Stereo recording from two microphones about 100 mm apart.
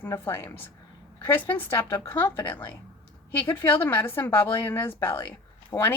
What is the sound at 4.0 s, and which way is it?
Speech, 20° left (ahead or behind).